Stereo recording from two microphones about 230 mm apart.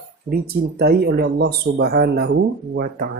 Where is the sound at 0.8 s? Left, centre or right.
Right.